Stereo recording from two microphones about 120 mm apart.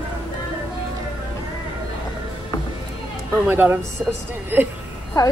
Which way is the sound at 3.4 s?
15° right (ahead or behind).